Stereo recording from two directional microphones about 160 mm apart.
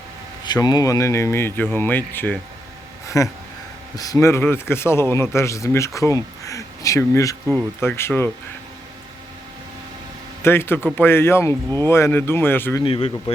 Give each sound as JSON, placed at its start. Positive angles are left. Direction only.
{"t": 0.4, "sound": "a man's voice", "side_deg": 25}
{"t": 7.4, "sound": "speech", "side_deg": 0}
{"t": 7.8, "sound": "speech", "side_deg": 15}
{"t": 10.4, "sound": "speech", "side_deg": 15}
{"t": 12.8, "sound": "speech", "side_deg": 35}